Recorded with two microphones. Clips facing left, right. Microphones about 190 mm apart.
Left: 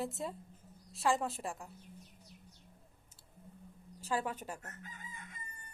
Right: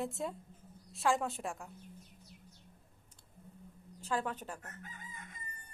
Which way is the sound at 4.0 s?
10° left (ahead or behind).